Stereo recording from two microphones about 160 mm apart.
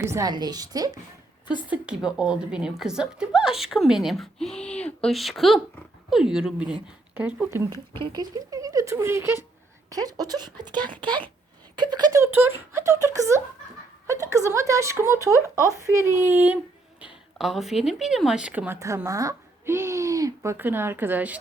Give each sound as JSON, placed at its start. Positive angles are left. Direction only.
{"t": 0.0, "sound": "speech", "side_deg": -20}
{"t": 1.5, "sound": "a woman's voice", "side_deg": -5}
{"t": 7.7, "sound": "speech", "side_deg": -30}
{"t": 17.3, "sound": "speech", "side_deg": 0}